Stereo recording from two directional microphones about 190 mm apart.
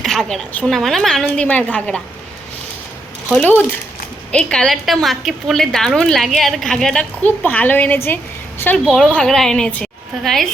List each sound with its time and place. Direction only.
0.0 s a woman's voice: centre (ahead or behind)
3.2 s a woman's voice: 5° left (ahead or behind)